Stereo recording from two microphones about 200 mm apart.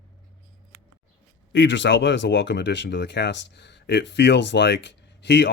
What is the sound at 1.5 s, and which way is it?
Speech, 65° left (ahead or behind).